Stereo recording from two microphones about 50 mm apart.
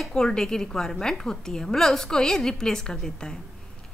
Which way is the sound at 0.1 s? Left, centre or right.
Centre.